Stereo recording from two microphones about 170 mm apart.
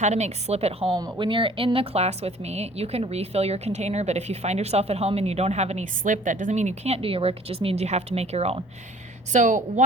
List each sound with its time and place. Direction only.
0.0 s a woman's voice: 40° right (ahead or behind)
0.9 s a woman's voice: 20° right (ahead or behind); by 8.6 s 35° right (ahead or behind)
9.3 s a woman's voice: 45° right (ahead or behind)